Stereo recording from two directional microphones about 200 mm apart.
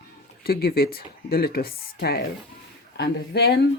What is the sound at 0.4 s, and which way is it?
Speech, 50° left (ahead or behind).